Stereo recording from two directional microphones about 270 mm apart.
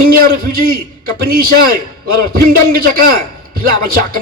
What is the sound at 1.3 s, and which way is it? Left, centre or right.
Speech, right.